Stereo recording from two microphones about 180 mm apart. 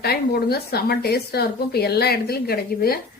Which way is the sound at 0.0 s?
60° left (ahead or behind).